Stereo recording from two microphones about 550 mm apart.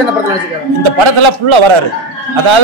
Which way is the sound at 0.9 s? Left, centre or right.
Right.